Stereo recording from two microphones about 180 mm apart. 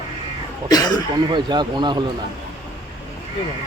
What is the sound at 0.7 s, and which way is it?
Speech, 20° left (ahead or behind).